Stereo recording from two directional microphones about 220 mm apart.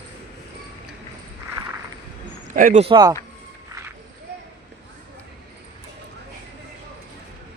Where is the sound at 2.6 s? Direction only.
40° right (ahead or behind).